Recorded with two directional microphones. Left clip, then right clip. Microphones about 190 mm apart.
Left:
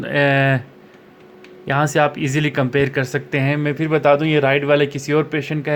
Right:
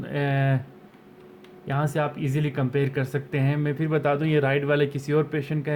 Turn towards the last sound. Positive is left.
turn(degrees=15)  # may be behind; listen again after turning